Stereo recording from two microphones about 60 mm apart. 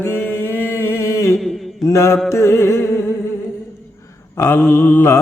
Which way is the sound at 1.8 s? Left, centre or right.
Left.